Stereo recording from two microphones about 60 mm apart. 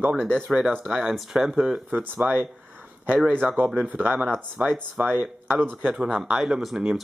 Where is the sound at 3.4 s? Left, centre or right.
Right.